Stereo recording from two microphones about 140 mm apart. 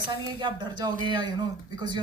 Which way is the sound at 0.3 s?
35° right (ahead or behind).